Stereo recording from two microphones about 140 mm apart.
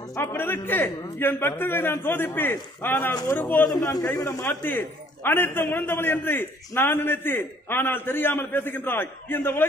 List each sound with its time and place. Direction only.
0.1 s a man's voice: 15° left (ahead or behind)
3.6 s a man's voice: 25° left (ahead or behind)